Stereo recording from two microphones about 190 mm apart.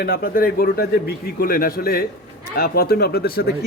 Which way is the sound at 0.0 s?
50° left (ahead or behind).